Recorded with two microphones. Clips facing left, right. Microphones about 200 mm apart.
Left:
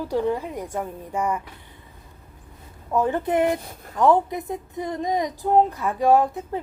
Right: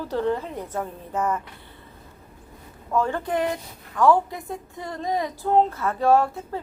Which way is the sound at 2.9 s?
20° left (ahead or behind).